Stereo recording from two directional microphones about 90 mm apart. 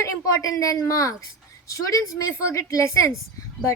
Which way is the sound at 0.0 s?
35° left (ahead or behind).